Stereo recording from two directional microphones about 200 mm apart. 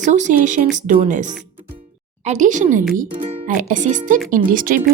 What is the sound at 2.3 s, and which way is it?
Speech, 40° right (ahead or behind).